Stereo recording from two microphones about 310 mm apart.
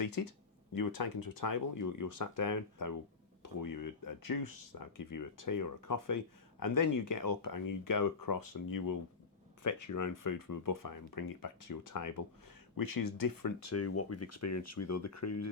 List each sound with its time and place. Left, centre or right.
0.0 s speech: left
9.6 s speech: left
12.7 s speech: left
13.7 s speech: left